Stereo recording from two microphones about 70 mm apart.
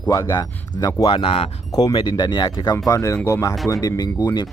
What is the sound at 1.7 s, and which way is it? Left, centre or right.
Speech, left.